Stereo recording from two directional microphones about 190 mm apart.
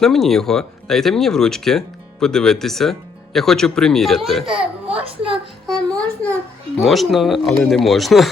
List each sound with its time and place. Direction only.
0.0 s speech: centre (ahead or behind)
4.9 s a child's voice: 30° right (ahead or behind)
5.6 s a child's voice: 5° left (ahead or behind)